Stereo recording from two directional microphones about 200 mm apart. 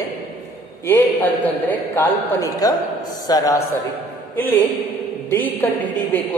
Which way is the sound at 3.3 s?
20° left (ahead or behind).